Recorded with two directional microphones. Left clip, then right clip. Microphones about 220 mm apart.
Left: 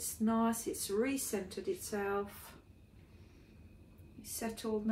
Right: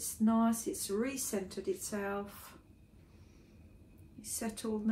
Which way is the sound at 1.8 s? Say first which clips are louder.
Left 1 dB; 20° right (ahead or behind).